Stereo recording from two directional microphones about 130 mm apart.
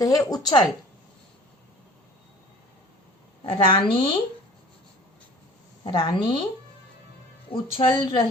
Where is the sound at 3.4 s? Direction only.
40° left (ahead or behind).